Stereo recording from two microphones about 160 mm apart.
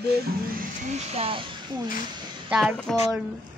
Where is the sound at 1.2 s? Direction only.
35° right (ahead or behind).